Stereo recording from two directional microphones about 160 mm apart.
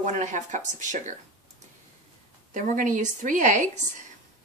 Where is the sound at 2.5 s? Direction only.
50° right (ahead or behind).